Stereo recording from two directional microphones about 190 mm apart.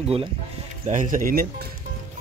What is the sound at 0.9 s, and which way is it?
Speech, 45° right (ahead or behind).